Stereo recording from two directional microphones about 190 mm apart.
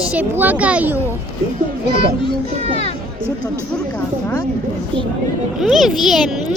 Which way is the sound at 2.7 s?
30° left (ahead or behind).